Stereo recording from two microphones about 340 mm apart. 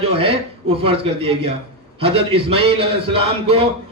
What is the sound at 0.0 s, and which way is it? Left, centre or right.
A man's voice, centre.